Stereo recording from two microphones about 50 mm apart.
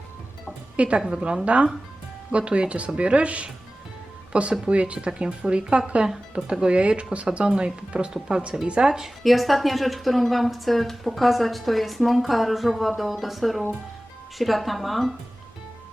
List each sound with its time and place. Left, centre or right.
0.8 s speech: right
8.9 s speech: centre